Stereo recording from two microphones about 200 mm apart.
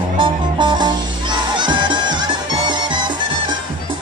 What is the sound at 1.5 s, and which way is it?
Crowd, 25° right (ahead or behind).